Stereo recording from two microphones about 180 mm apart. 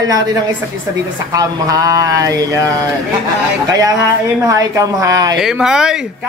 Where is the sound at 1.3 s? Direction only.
20° right (ahead or behind).